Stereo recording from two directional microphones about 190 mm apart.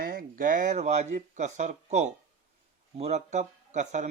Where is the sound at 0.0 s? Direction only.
50° right (ahead or behind).